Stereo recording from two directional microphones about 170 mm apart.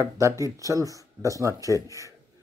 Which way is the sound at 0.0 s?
20° right (ahead or behind).